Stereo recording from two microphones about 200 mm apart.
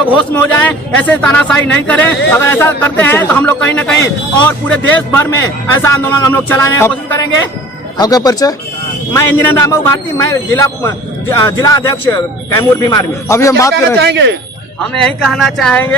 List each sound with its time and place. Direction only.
0.1 s speech: 10° left (ahead or behind)
14.0 s speech: 60° right (ahead or behind)
15.0 s speech: centre (ahead or behind)